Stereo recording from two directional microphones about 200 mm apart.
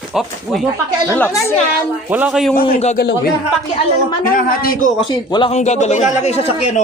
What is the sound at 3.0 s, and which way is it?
Speech, 55° left (ahead or behind).